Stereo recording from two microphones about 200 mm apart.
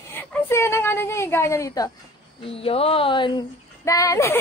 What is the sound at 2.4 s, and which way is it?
Speech, 30° left (ahead or behind).